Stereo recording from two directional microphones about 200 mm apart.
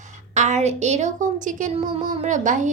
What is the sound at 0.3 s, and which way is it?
A woman's voice, 35° right (ahead or behind).